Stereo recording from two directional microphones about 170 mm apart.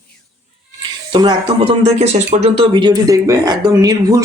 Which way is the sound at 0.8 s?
25° right (ahead or behind).